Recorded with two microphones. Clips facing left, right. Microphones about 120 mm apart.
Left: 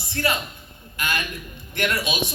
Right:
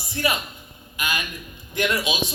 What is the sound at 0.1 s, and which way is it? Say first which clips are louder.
A man's voice: even; 15° right (ahead or behind).